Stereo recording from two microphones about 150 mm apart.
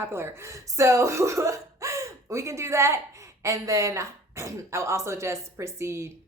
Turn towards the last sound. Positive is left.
turn(degrees=-20)  # may be behind; listen again after turning